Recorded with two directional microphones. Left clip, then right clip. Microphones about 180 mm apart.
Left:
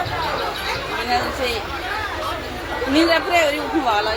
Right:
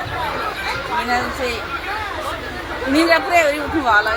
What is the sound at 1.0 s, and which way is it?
Speech, 30° right (ahead or behind).